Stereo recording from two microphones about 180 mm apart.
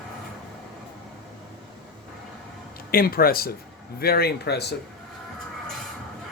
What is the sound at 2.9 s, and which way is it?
Speech, 55° left (ahead or behind).